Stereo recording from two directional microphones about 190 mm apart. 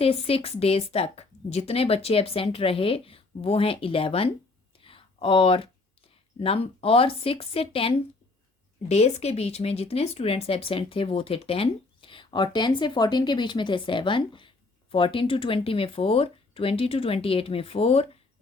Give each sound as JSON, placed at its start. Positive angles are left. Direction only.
{"t": 0.0, "sound": "speech", "side_deg": 30}
{"t": 4.8, "sound": "a sound", "side_deg": 30}
{"t": 6.4, "sound": "speech", "side_deg": 30}